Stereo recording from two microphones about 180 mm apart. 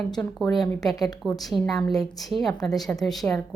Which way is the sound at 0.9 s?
20° left (ahead or behind).